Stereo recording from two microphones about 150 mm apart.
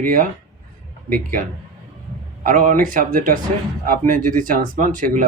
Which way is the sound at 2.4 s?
65° right (ahead or behind).